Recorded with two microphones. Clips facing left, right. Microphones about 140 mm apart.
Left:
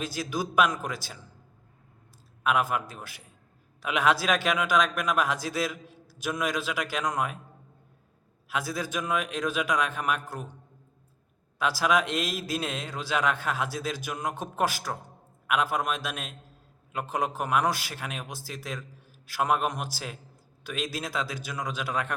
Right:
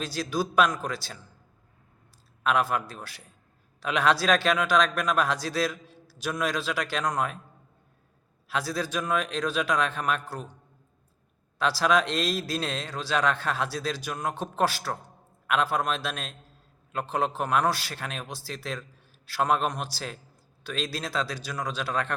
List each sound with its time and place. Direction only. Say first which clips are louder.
0.0 s a man's voice: right 2 dB; 15° left (ahead or behind)
2.4 s a man's voice: right 1 dB; 15° left (ahead or behind)
8.4 s a man's voice: right 2 dB; 15° left (ahead or behind)
11.6 s a man's voice: right 1 dB; 15° left (ahead or behind)